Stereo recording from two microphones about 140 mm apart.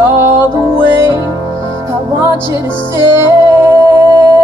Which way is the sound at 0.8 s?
20° right (ahead or behind).